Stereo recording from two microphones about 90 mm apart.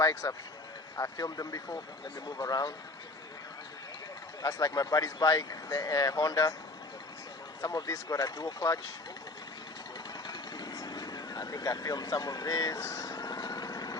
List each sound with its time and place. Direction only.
0.0 s speech: 35° left (ahead or behind)
4.4 s speech: 40° left (ahead or behind)
7.6 s speech: 40° left (ahead or behind)
10.2 s vehicle: 50° left (ahead or behind)